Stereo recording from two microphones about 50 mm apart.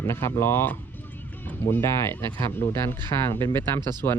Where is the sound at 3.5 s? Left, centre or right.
Left.